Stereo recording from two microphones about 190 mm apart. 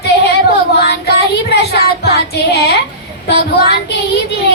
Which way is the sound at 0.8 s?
60° left (ahead or behind).